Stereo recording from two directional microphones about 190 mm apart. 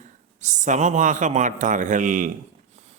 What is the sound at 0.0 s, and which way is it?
A man's voice, 40° right (ahead or behind).